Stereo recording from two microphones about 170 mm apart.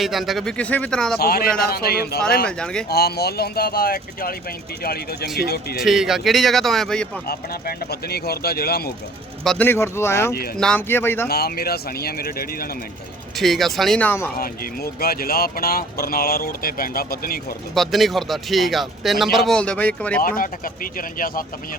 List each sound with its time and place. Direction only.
0.0 s speech: centre (ahead or behind)
1.2 s speech: 65° left (ahead or behind)
2.5 s speech: 5° left (ahead or behind)
2.9 s speech: 70° left (ahead or behind)
5.8 s speech: centre (ahead or behind)
7.3 s speech: 65° left (ahead or behind)
9.4 s speech: centre (ahead or behind)
9.6 s speech: 15° left (ahead or behind)
11.3 s speech: 65° left (ahead or behind)
13.3 s speech: centre (ahead or behind)
14.3 s speech: 60° left (ahead or behind)
17.7 s speech: centre (ahead or behind)
20.2 s speech: 55° left (ahead or behind)